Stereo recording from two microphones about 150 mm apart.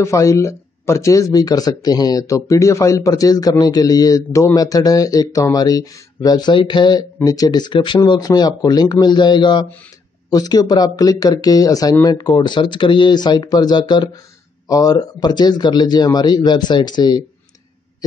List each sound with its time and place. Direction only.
0.0 s speech: 20° left (ahead or behind)